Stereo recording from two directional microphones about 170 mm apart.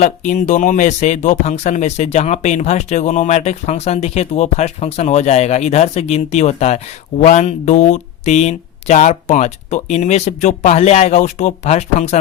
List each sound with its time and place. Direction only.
0.0 s speech: 45° left (ahead or behind)